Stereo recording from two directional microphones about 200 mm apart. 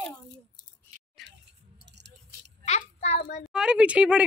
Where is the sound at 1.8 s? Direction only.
60° right (ahead or behind).